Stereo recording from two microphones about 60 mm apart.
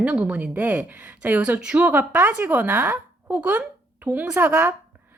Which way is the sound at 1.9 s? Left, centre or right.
Right.